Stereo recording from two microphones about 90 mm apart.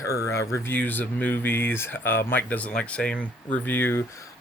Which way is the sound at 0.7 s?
20° left (ahead or behind).